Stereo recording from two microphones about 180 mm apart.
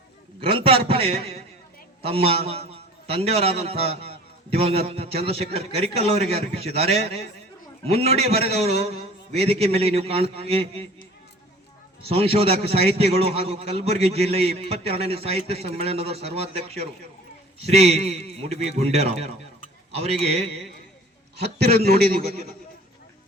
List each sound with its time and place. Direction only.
0.3 s a man's voice: 30° right (ahead or behind)
12.0 s a man's voice: 30° right (ahead or behind)
21.3 s a man's voice: 65° right (ahead or behind)